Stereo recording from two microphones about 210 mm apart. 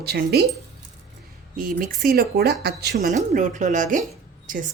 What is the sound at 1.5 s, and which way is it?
A woman's voice, 40° right (ahead or behind).